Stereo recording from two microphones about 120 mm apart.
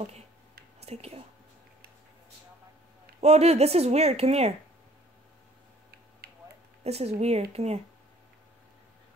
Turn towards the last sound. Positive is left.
turn(degrees=-60)  # may be behind; listen again after turning